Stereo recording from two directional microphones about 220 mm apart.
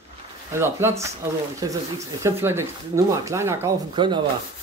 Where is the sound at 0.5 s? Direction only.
10° right (ahead or behind).